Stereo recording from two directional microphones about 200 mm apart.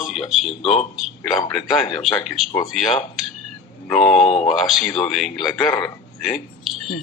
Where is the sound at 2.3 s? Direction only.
Centre (ahead or behind).